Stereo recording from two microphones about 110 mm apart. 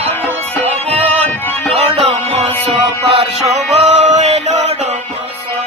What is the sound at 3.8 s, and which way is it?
Music, 90° right.